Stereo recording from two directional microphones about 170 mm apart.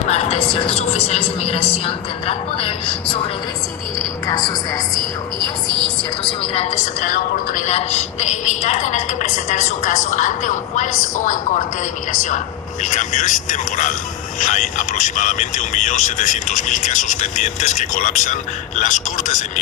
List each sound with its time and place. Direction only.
0.1 s a woman's voice: 40° left (ahead or behind)
4.3 s a woman's voice: 25° left (ahead or behind)
6.4 s a woman's voice: 35° left (ahead or behind)